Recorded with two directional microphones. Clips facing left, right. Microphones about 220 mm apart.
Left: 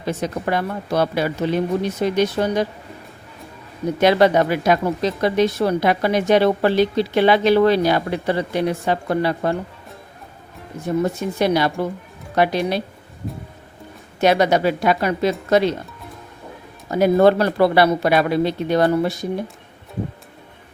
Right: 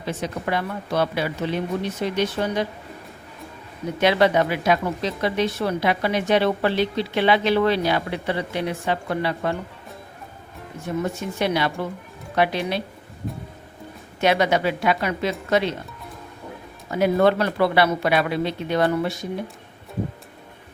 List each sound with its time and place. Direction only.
0.0 s speech: 40° left (ahead or behind)
4.0 s speech: 45° left (ahead or behind)
11.0 s speech: 40° left (ahead or behind)
14.2 s speech: 40° left (ahead or behind)
16.9 s speech: 40° left (ahead or behind)